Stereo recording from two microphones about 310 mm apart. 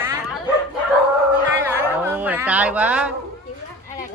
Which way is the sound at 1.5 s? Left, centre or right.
Centre.